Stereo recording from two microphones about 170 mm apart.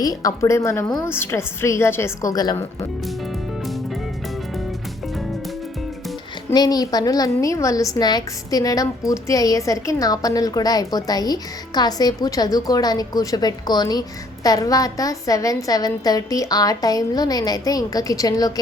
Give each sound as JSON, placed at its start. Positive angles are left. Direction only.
{"t": 0.0, "sound": "a woman's voice", "side_deg": 20}
{"t": 6.5, "sound": "a woman's voice", "side_deg": 25}